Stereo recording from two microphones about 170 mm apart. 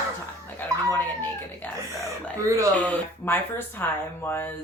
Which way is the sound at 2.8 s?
10° left (ahead or behind).